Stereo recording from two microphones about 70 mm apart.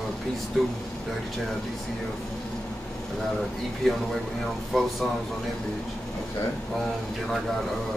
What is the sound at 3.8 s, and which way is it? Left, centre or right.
Speech, centre.